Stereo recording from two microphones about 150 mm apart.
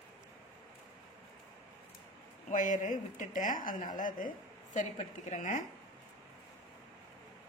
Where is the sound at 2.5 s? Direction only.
60° left (ahead or behind).